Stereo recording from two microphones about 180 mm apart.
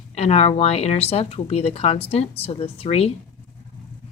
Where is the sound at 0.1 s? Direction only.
35° left (ahead or behind).